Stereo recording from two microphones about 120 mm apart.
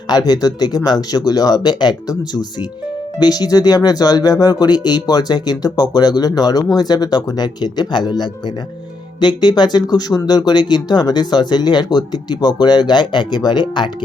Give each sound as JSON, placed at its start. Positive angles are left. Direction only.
{"t": 0.1, "sound": "speech", "side_deg": 35}